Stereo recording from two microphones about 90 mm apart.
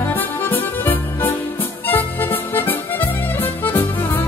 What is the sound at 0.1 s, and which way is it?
Music, 20° left (ahead or behind).